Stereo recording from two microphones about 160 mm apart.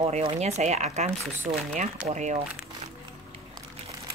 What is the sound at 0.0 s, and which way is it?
Speech, 40° right (ahead or behind).